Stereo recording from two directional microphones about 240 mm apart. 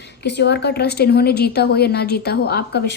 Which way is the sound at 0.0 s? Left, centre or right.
Left.